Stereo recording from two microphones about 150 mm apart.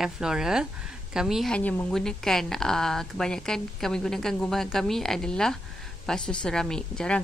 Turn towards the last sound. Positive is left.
turn(degrees=5)  # may be behind; listen again after turning